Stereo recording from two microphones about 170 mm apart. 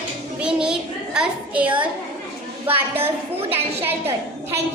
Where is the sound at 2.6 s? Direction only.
35° right (ahead or behind).